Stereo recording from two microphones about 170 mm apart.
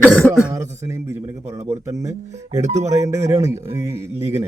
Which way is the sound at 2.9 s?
20° right (ahead or behind).